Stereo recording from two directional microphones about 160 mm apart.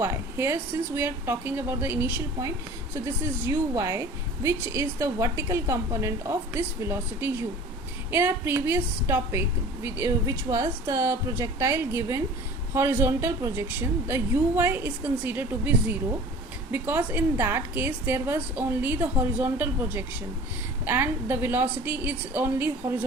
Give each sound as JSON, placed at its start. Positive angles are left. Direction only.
{"t": 0.0, "sound": "a woman's voice", "side_deg": -15}